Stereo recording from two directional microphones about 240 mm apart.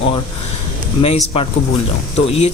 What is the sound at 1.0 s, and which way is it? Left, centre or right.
Speech, left.